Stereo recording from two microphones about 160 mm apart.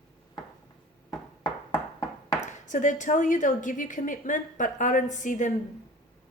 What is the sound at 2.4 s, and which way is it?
A woman's voice, 50° left (ahead or behind).